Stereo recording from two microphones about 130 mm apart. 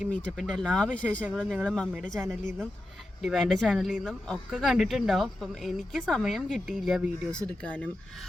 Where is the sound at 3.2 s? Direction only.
Centre (ahead or behind).